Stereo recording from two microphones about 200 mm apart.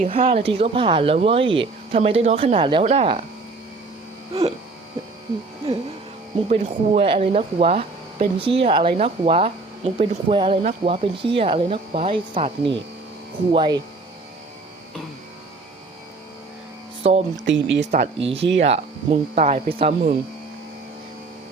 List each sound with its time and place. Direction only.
0.0 s speech: 30° right (ahead or behind)
6.5 s speech: 30° right (ahead or behind)
17.0 s speech: 30° right (ahead or behind)
17.4 s speech: 65° right (ahead or behind)
17.9 s speech: 30° right (ahead or behind)